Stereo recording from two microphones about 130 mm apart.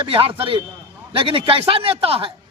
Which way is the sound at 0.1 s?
45° right (ahead or behind).